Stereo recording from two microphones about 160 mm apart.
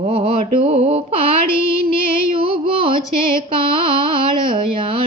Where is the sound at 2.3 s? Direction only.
35° right (ahead or behind).